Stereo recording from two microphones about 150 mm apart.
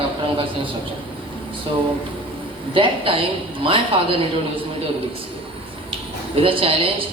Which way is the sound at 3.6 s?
35° right (ahead or behind).